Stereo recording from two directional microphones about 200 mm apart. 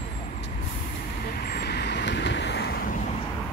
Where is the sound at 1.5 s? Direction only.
55° left (ahead or behind).